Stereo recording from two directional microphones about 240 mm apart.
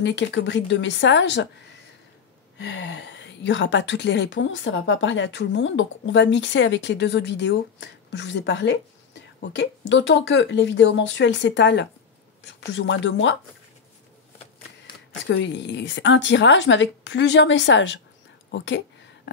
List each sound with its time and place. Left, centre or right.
0.0 s a woman's voice: left
2.6 s a woman's voice: left
15.2 s a woman's voice: left